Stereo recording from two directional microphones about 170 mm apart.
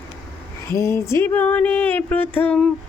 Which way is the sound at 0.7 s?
15° left (ahead or behind).